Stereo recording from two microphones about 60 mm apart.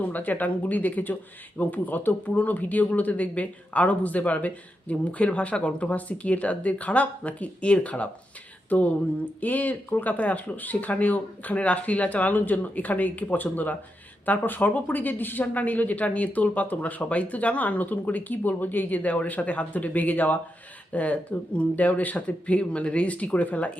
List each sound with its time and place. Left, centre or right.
0.0 s speech: left